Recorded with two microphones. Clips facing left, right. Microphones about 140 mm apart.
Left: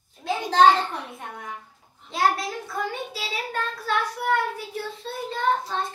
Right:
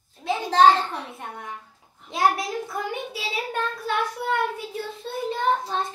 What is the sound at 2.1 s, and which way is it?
A child's voice, 15° right (ahead or behind).